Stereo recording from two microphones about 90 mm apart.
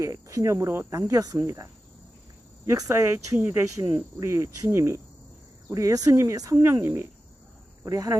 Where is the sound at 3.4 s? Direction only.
20° right (ahead or behind).